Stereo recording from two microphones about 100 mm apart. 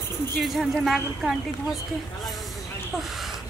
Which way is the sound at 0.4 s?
Centre (ahead or behind).